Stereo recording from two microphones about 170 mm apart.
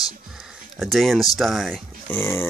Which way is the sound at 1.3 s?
Centre (ahead or behind).